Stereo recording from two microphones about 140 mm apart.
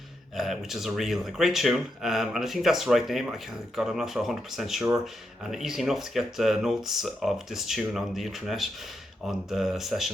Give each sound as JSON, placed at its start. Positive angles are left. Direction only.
{"t": 0.3, "sound": "speech", "side_deg": 0}